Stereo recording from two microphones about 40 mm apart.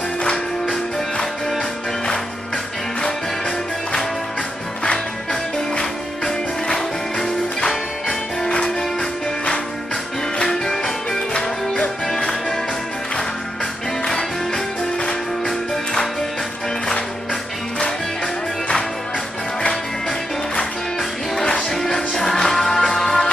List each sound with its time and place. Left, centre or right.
0.2 s music: centre
10.4 s music: centre
14.0 s music: centre
17.7 s music: left
21.6 s music: centre